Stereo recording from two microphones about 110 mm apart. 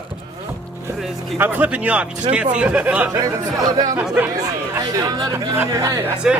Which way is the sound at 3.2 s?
35° right (ahead or behind).